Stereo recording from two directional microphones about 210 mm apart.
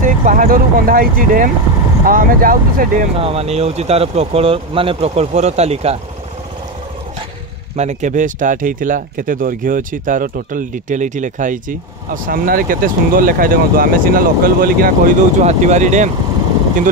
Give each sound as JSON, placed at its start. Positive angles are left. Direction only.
{"t": 0.0, "sound": "speech", "side_deg": -40}
{"t": 3.2, "sound": "speech", "side_deg": -25}
{"t": 7.7, "sound": "speech", "side_deg": -35}